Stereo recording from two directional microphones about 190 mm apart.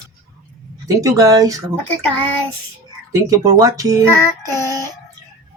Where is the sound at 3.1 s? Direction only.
15° right (ahead or behind).